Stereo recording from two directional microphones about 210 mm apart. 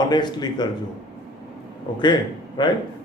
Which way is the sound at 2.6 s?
20° left (ahead or behind).